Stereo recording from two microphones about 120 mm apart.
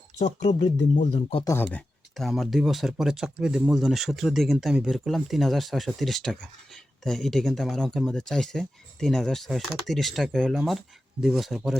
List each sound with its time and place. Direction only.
0.2 s speech: 70° left (ahead or behind); by 1.5 s 50° left (ahead or behind)
1.5 s speech: 20° left (ahead or behind)
2.1 s speech: centre (ahead or behind)